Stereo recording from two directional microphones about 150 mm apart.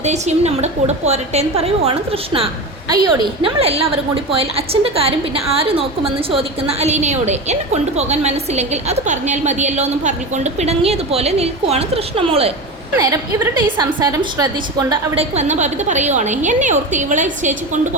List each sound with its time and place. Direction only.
0.0 s a woman's voice: 50° right (ahead or behind)
13.0 s a woman's voice: 20° right (ahead or behind)
15.1 s a woman's voice: 45° right (ahead or behind)